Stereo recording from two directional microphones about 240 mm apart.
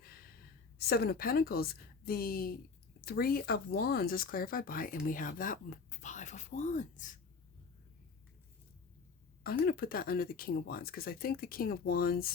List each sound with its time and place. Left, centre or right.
0.8 s speech: left
9.4 s speech: left